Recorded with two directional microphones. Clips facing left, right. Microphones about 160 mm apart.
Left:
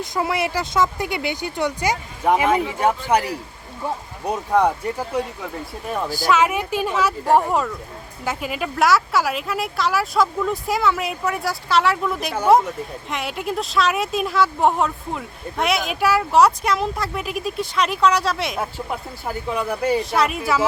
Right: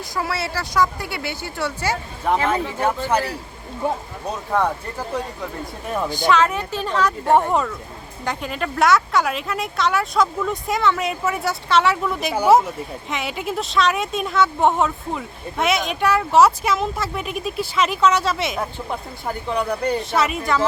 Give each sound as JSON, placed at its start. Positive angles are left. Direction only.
{"t": 0.0, "sound": "speech", "side_deg": 20}
{"t": 6.1, "sound": "a woman's voice", "side_deg": 5}